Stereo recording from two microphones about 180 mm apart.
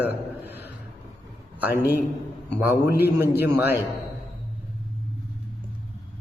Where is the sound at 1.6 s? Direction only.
10° right (ahead or behind).